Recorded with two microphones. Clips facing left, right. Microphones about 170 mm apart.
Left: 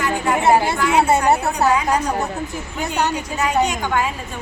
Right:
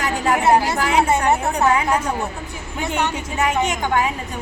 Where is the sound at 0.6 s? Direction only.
30° left (ahead or behind).